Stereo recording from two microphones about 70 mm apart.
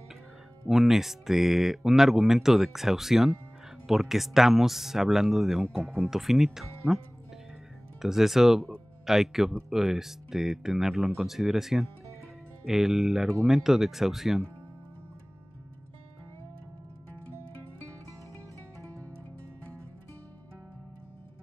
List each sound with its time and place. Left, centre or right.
0.7 s speech: centre
5.8 s speech: right
6.0 s speech: centre
8.0 s speech: centre